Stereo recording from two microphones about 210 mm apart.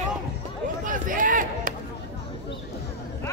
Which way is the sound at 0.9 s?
40° right (ahead or behind).